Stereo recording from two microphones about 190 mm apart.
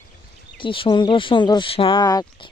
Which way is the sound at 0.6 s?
25° left (ahead or behind).